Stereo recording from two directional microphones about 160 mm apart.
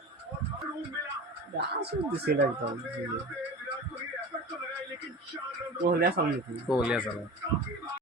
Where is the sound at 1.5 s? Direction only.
90° right.